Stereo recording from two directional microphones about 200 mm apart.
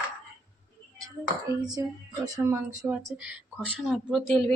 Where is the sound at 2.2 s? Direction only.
10° right (ahead or behind).